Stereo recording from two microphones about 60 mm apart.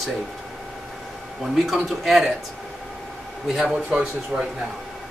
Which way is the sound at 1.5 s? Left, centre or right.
Centre.